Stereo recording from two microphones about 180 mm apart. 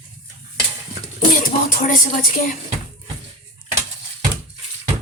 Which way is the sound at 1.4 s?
45° left (ahead or behind).